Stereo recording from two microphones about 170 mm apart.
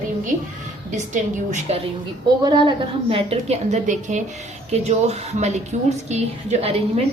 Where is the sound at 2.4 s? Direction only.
25° right (ahead or behind).